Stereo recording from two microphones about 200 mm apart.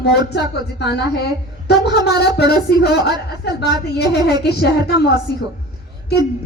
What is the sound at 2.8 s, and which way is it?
A woman's voice, 55° left (ahead or behind).